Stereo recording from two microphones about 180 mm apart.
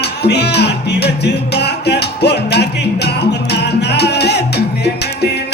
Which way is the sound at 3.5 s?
65° left (ahead or behind).